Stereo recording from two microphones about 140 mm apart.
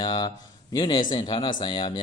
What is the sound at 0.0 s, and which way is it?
Speech, 30° left (ahead or behind).